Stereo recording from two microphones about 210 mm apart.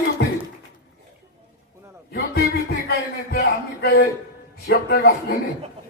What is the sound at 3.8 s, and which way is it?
Speech, 45° left (ahead or behind).